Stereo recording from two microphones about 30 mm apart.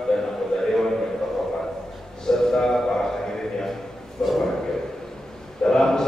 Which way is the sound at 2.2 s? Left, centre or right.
Centre.